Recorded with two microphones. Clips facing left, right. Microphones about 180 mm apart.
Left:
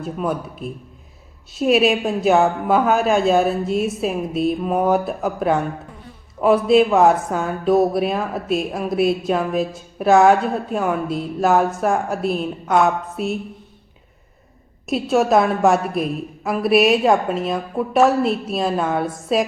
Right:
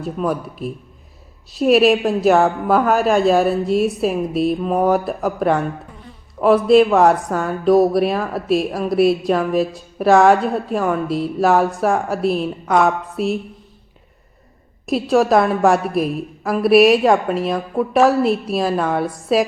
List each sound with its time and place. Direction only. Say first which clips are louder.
0.0 s speech: right 2 dB; centre (ahead or behind)
14.8 s speech: right 2 dB; centre (ahead or behind)